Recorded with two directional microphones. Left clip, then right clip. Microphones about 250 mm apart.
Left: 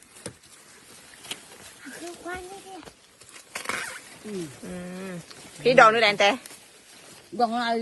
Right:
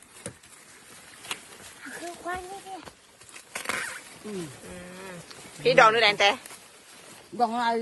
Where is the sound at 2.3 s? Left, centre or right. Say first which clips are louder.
Right 2 dB; right.